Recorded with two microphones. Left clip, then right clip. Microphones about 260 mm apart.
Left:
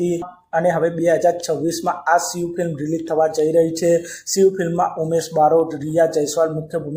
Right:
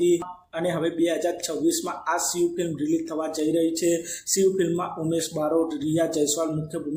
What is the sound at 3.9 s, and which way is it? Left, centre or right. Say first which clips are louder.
Speech: left 7 dB; centre.